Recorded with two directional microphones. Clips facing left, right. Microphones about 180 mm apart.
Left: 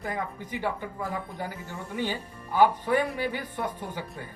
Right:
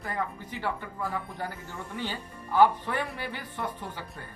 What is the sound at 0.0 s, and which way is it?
Speech, 15° left (ahead or behind).